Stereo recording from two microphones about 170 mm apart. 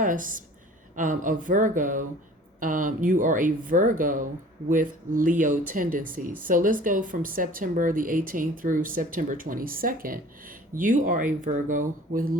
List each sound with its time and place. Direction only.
0.0 s speech: 50° right (ahead or behind)